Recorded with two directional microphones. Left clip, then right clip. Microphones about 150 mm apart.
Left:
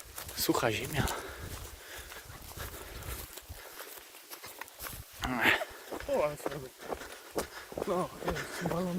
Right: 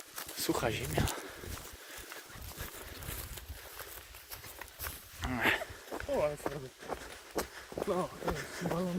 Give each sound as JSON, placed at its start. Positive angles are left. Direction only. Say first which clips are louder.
{"t": 0.3, "sound": "speech", "louder": "left 4 dB", "side_deg": 55}
{"t": 5.2, "sound": "a sound", "louder": "left 3 dB", "side_deg": 50}
{"t": 5.9, "sound": "a sound", "louder": "even", "side_deg": 0}
{"t": 6.5, "sound": "speech", "louder": "left 1 dB", "side_deg": -10}
{"t": 6.9, "sound": "run", "louder": "left 1 dB", "side_deg": -5}
{"t": 7.9, "sound": "speech", "louder": "left 1 dB", "side_deg": 55}